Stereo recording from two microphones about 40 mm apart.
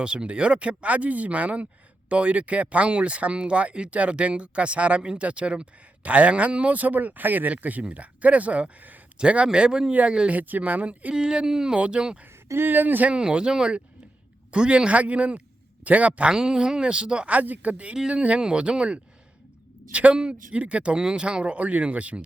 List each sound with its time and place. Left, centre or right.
0.0 s speech: right
6.7 s speech: right
10.3 s speech: right
11.1 s speech: right
12.5 s speech: right
13.1 s speech: right
14.8 s speech: right
16.3 s speech: centre
17.2 s speech: right
20.9 s speech: right